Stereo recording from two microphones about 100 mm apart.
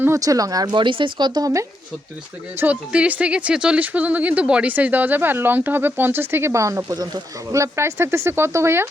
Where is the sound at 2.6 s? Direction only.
15° right (ahead or behind).